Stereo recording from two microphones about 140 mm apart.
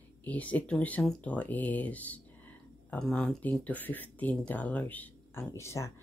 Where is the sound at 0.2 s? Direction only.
10° left (ahead or behind).